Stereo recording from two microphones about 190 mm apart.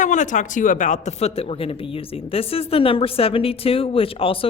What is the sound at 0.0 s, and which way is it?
Speech, 40° left (ahead or behind).